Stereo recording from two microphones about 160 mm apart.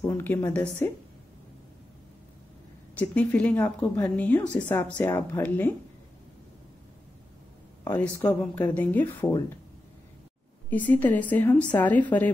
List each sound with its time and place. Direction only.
0.0 s a woman's voice: 15° left (ahead or behind)
3.0 s a woman's voice: 10° left (ahead or behind)
7.8 s a woman's voice: 10° left (ahead or behind)
10.7 s a woman's voice: 10° left (ahead or behind)